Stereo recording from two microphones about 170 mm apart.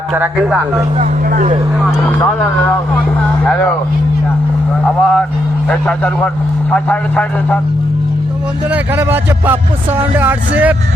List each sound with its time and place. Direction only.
0.1 s a man's voice: 5° right (ahead or behind)
1.3 s speech: 50° right (ahead or behind)
1.8 s speech: 10° left (ahead or behind)
4.9 s a man's voice: 5° left (ahead or behind)
8.7 s speech: 10° right (ahead or behind)